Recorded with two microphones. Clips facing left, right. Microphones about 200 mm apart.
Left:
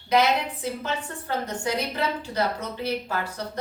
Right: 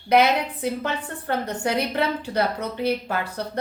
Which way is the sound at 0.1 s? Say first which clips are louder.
Right 3 dB; 60° right (ahead or behind).